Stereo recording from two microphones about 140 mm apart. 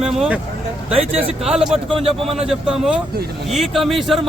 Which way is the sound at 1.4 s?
5° right (ahead or behind).